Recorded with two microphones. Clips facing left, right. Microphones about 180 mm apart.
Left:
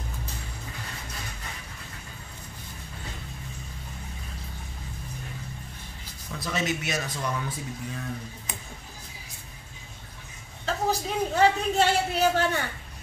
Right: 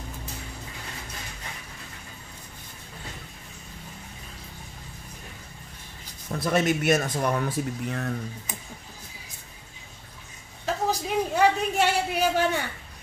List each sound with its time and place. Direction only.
6.3 s speech: 50° right (ahead or behind)
10.6 s a man's voice: 15° right (ahead or behind)